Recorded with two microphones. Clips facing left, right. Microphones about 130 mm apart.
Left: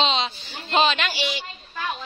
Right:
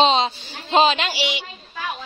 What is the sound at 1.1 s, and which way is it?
Speech, 90° right.